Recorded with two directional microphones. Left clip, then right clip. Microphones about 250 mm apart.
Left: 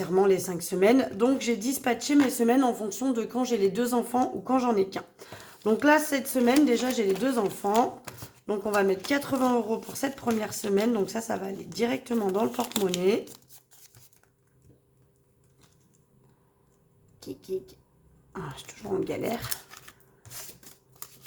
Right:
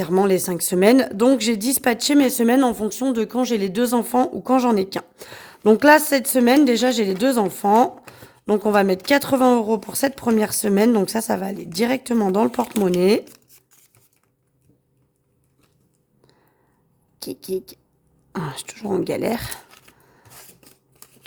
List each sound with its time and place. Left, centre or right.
0.0 s speech: right
17.2 s speech: right